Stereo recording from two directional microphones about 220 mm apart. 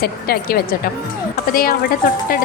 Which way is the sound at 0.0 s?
45° left (ahead or behind).